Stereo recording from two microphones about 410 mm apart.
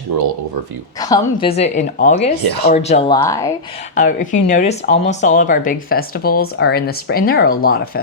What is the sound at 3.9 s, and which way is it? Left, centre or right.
Speech, centre.